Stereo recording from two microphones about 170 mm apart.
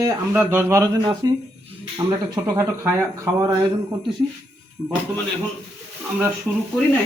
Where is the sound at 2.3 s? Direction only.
15° right (ahead or behind).